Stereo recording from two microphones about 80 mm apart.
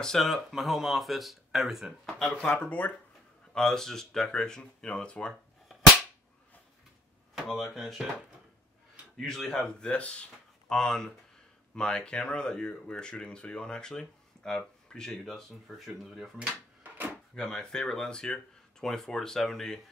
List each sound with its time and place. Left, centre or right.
0.0 s speech: centre
2.0 s speech: centre
3.5 s speech: centre
7.4 s speech: centre
9.2 s speech: centre
17.4 s speech: centre